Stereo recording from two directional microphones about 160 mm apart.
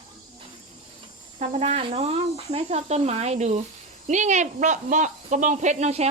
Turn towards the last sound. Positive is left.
turn(degrees=-45)  # may be behind; listen again after turning